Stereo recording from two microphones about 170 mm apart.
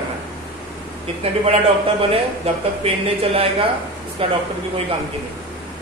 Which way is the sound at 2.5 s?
35° right (ahead or behind).